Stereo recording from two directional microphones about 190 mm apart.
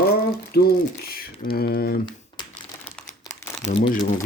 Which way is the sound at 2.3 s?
25° left (ahead or behind).